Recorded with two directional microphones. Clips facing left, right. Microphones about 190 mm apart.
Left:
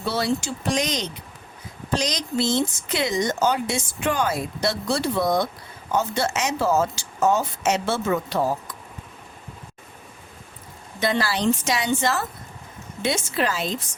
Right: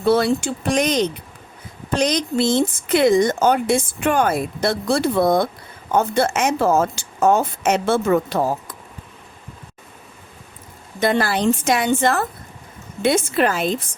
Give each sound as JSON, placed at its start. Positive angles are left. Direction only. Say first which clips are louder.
{"t": 0.0, "sound": "speech", "louder": "right 7 dB", "side_deg": -55}
{"t": 11.0, "sound": "a woman's voice", "louder": "right 4 dB", "side_deg": -50}